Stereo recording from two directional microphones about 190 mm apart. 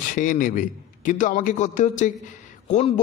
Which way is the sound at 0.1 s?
45° left (ahead or behind).